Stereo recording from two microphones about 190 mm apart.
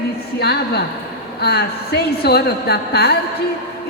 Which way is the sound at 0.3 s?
60° left (ahead or behind).